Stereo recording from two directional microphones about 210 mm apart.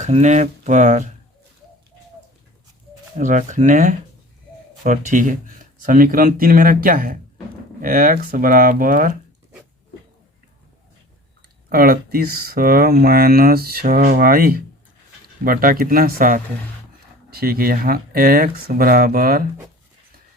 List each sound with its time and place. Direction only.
0.0 s speech: 35° right (ahead or behind)
3.2 s speech: 35° right (ahead or behind)
11.7 s speech: 45° right (ahead or behind)